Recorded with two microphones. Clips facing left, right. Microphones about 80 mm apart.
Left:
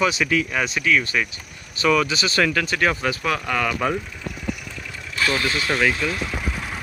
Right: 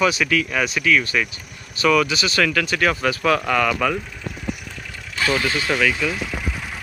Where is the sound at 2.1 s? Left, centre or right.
Left.